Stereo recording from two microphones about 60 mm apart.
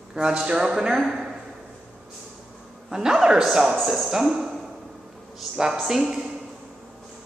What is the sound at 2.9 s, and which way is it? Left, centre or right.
Speech, centre.